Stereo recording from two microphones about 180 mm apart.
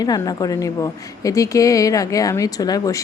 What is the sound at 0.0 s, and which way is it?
A woman's voice, 20° left (ahead or behind).